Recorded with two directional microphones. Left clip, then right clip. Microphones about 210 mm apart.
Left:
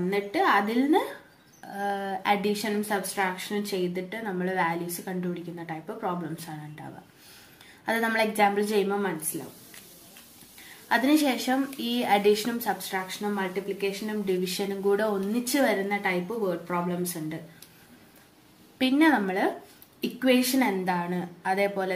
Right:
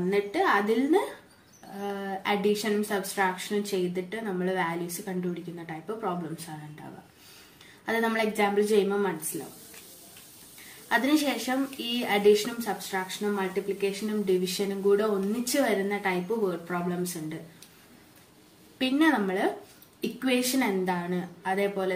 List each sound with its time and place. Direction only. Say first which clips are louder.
0.1 s a woman's voice: left 1 dB; 20° left (ahead or behind)
7.8 s a woman's voice: left 1 dB; 20° left (ahead or behind)
10.9 s a woman's voice: left 2 dB; 20° left (ahead or behind)
18.8 s a woman's voice: left 2 dB; 15° left (ahead or behind)